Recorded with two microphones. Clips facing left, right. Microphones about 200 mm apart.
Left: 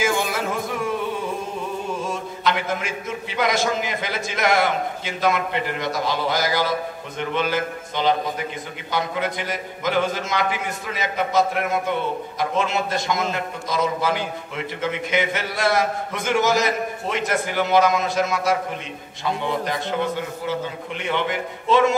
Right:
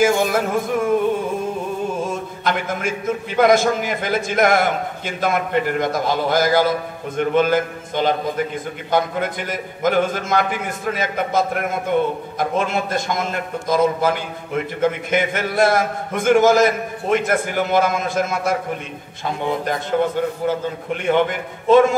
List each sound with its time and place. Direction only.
0.0 s music: 50° right (ahead or behind)
2.4 s a man's voice: 50° right (ahead or behind)